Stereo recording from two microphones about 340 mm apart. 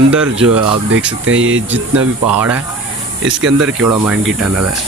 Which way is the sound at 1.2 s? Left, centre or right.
Right.